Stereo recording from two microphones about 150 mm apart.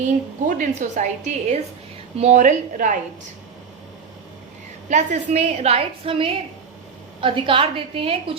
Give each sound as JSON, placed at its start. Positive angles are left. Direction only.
{"t": 0.0, "sound": "a woman's voice", "side_deg": -60}
{"t": 4.9, "sound": "a woman's voice", "side_deg": -50}